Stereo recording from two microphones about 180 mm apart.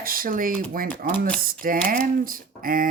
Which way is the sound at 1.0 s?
55° right (ahead or behind).